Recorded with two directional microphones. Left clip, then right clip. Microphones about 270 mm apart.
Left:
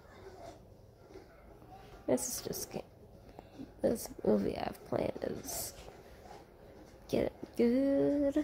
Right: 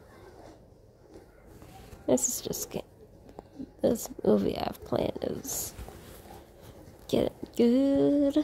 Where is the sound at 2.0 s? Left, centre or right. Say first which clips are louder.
Right 6 dB; centre.